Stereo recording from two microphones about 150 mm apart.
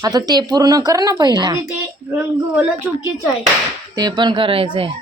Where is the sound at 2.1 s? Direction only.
15° right (ahead or behind).